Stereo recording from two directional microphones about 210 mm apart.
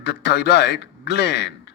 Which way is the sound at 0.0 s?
55° left (ahead or behind).